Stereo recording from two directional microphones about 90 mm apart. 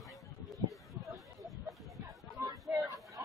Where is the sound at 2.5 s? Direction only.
40° right (ahead or behind).